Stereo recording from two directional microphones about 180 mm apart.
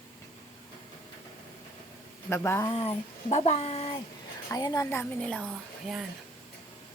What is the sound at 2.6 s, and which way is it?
Speech, 30° left (ahead or behind).